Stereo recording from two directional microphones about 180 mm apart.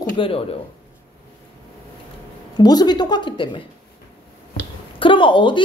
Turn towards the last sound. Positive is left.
turn(degrees=25)  # may be behind; listen again after turning